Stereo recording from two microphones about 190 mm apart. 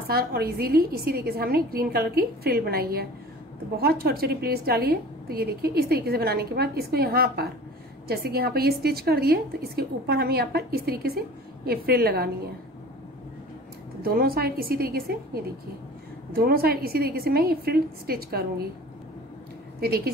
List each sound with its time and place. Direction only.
0.1 s a woman's voice: 55° right (ahead or behind)
14.0 s a woman's voice: 50° right (ahead or behind)